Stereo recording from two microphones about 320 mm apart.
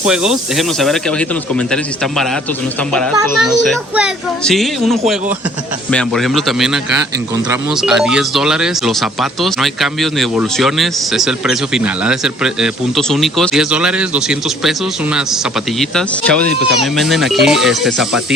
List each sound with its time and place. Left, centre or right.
0.0 s speech: centre
3.6 s speech: centre
7.8 s speech: centre